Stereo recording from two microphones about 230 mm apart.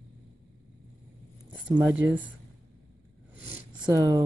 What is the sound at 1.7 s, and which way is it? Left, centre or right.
Speech, centre.